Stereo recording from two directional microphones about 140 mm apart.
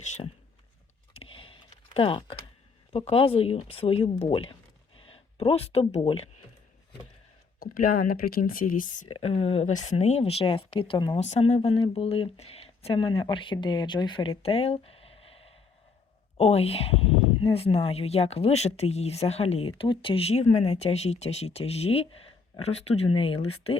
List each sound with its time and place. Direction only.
1.2 s a sound: 40° left (ahead or behind)
2.9 s speech: 45° left (ahead or behind)
4.9 s a sound: 40° left (ahead or behind)
6.0 s speech: 40° left (ahead or behind)
7.6 s speech: 90° left
9.0 s speech: 40° left (ahead or behind)
11.2 s speech: 50° left (ahead or behind)